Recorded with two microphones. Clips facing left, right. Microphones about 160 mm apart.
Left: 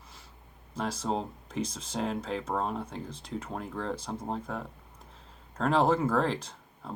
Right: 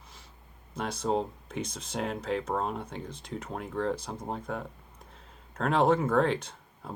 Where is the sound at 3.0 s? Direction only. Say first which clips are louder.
Even; 30° left (ahead or behind).